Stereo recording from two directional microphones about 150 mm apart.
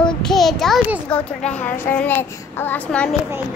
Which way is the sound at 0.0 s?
5° left (ahead or behind).